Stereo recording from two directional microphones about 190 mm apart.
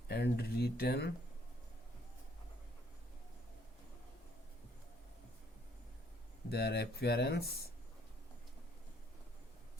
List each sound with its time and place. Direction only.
0.1 s speech: 60° left (ahead or behind)
6.5 s speech: 60° left (ahead or behind)